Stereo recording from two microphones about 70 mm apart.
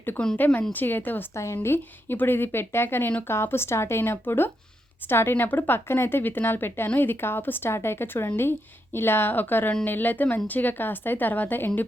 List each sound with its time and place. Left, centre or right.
0.3 s a woman's voice: left